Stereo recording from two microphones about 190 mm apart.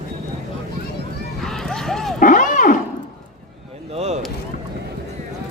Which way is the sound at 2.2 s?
45° left (ahead or behind).